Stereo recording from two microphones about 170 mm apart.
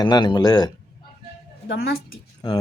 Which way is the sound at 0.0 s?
25° left (ahead or behind).